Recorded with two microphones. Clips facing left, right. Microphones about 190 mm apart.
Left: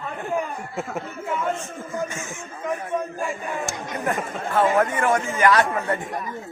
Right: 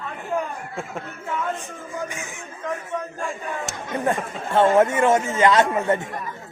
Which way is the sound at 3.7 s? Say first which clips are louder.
Right 6 dB; 20° right (ahead or behind).